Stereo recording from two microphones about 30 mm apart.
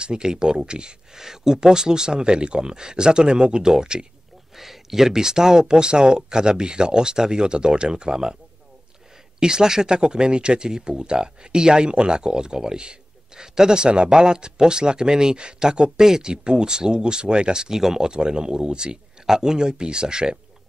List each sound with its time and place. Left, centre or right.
0.0 s speech: right
1.1 s speech: centre
4.6 s speech: centre
9.4 s speech: right
19.2 s speech: centre